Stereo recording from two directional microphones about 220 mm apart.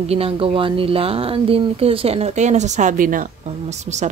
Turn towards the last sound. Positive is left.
turn(degrees=-30)  # may be behind; listen again after turning